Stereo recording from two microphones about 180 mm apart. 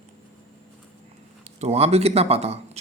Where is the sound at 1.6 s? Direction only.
35° right (ahead or behind).